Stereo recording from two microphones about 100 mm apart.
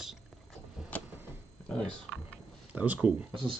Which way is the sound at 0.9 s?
15° left (ahead or behind).